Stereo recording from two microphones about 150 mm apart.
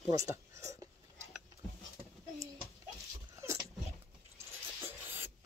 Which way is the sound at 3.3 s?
20° right (ahead or behind).